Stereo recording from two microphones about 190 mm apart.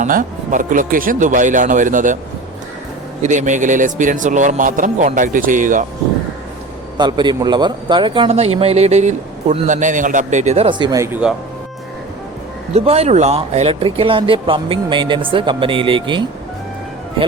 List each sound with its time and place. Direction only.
0.0 s a man's voice: 45° right (ahead or behind)
3.2 s a man's voice: 40° right (ahead or behind)
6.9 s a man's voice: 20° right (ahead or behind)
12.7 s a man's voice: 30° right (ahead or behind)